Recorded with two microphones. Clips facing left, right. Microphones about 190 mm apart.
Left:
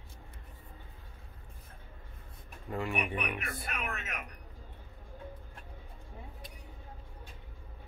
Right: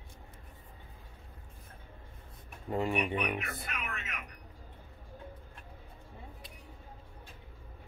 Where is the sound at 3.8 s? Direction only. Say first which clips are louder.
Left 3 dB; 45° left (ahead or behind).